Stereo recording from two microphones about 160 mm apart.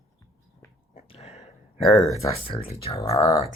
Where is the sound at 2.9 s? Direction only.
40° left (ahead or behind).